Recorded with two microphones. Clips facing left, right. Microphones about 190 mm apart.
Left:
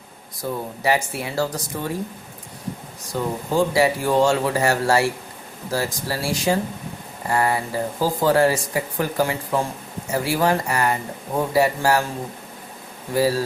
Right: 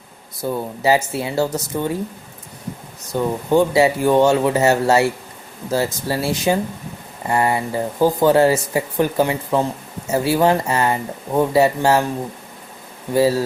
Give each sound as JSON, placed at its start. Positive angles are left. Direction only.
{"t": 0.8, "sound": "speech", "side_deg": -25}
{"t": 3.1, "sound": "speech", "side_deg": -25}
{"t": 13.1, "sound": "speech", "side_deg": -25}